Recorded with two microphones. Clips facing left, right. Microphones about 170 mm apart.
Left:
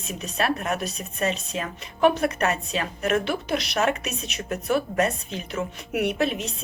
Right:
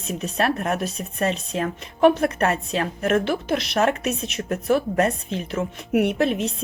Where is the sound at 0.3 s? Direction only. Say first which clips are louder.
Right 2 dB; 55° right (ahead or behind).